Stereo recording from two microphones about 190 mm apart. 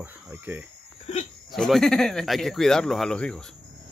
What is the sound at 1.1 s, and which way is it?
Hiccup, 35° left (ahead or behind).